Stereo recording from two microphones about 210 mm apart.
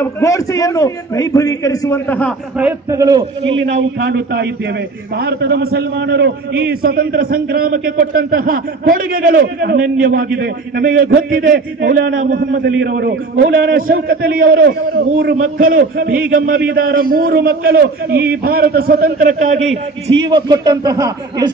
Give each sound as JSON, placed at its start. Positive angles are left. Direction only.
{"t": 0.0, "sound": "a man's voice", "side_deg": 15}
{"t": 2.6, "sound": "a man's voice", "side_deg": -15}
{"t": 4.0, "sound": "a man's voice", "side_deg": -55}
{"t": 19.6, "sound": "a man's voice", "side_deg": -65}
{"t": 20.2, "sound": "a man's voice", "side_deg": -20}